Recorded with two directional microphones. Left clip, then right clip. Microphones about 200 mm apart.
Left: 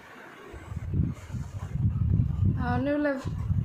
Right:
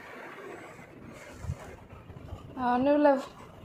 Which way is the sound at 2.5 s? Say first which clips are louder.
Right 4 dB; centre (ahead or behind).